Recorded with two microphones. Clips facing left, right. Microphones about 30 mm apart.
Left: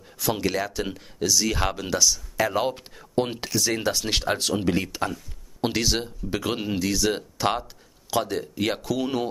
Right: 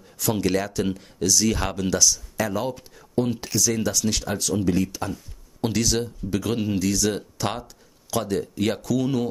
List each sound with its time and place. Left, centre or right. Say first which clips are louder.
0.2 s speech: right 2 dB; centre; by 3.6 s left
3.6 s speech: right 2 dB; left